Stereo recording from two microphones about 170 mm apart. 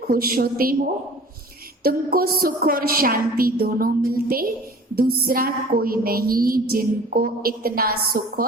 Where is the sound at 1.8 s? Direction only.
60° right (ahead or behind).